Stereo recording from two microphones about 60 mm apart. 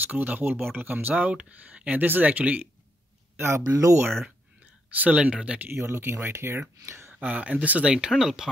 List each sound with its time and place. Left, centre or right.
0.0 s speech: right
1.1 s speech: centre
3.3 s speech: right
4.9 s speech: right
5.7 s speech: right
7.2 s speech: right
7.8 s speech: centre